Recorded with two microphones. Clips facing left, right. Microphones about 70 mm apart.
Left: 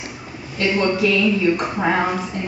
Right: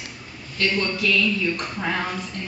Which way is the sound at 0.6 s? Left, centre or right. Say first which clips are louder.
Left 6 dB; centre.